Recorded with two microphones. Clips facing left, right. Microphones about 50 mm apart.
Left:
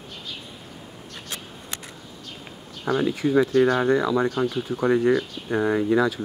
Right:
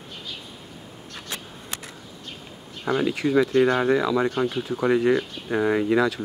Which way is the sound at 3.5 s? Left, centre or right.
Right.